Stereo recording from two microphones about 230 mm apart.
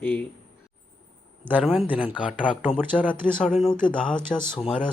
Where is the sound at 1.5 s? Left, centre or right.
Centre.